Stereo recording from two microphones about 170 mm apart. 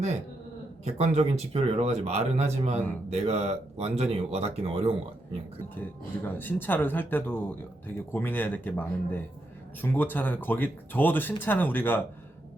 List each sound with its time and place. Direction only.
0.9 s speech: 40° right (ahead or behind)
5.6 s speech: 10° left (ahead or behind)